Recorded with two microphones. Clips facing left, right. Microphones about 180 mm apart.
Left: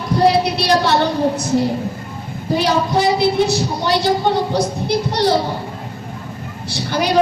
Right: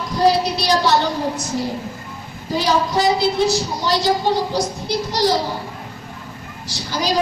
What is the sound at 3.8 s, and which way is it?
A child's voice, 60° left (ahead or behind).